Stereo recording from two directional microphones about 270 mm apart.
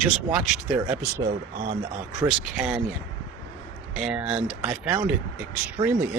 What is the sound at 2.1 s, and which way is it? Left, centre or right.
Speech, centre.